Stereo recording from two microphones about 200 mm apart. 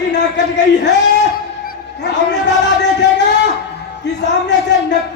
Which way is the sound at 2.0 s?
60° left (ahead or behind).